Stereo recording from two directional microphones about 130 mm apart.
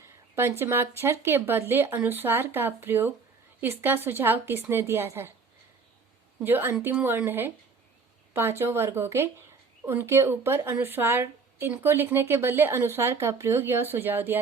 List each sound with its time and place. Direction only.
0.0 s a woman's voice: 20° right (ahead or behind)
6.4 s a woman's voice: 15° right (ahead or behind)